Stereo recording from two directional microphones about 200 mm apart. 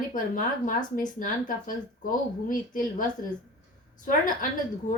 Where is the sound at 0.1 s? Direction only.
40° left (ahead or behind).